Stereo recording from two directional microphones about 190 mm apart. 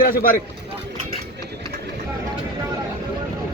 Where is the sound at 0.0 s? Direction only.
50° left (ahead or behind).